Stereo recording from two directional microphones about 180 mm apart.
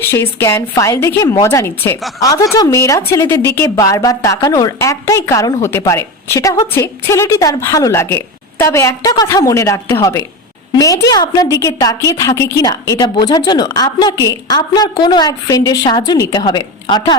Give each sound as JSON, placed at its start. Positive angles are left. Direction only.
{"t": 0.1, "sound": "a woman's voice", "side_deg": 15}